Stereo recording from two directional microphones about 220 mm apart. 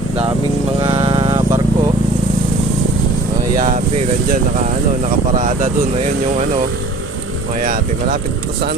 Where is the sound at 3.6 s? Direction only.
35° right (ahead or behind).